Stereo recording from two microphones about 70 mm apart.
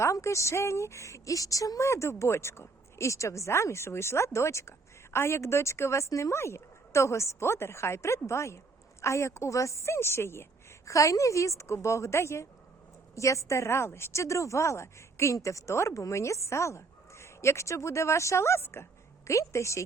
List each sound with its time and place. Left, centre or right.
0.0 s speech: left
10.8 s speech: left